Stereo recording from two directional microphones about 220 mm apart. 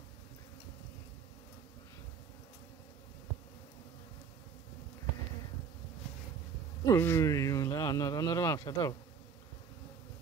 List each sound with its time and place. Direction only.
6.9 s speech: 10° left (ahead or behind)